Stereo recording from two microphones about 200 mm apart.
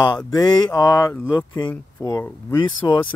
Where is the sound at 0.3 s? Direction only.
20° left (ahead or behind).